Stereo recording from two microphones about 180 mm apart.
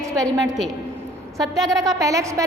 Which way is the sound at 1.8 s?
20° right (ahead or behind).